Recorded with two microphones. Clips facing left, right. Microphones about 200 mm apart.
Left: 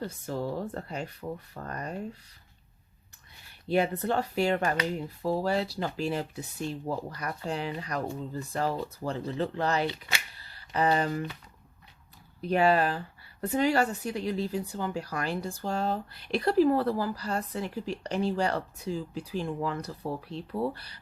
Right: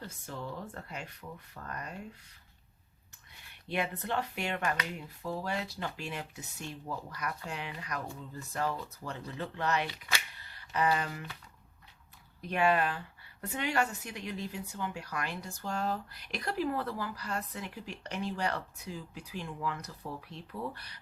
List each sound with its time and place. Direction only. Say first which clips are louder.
0.0 s speech: left 9 dB; 35° left (ahead or behind)
3.7 s speech: left 8 dB; 35° left (ahead or behind)
12.4 s speech: left 5 dB; 35° left (ahead or behind)